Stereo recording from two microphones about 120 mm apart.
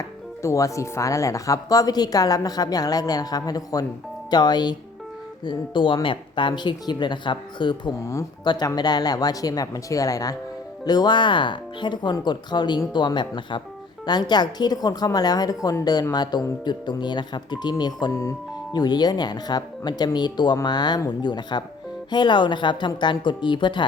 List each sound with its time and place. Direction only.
0.4 s speech: 25° left (ahead or behind)
18.1 s speech: 20° left (ahead or behind)
18.7 s speech: 35° left (ahead or behind)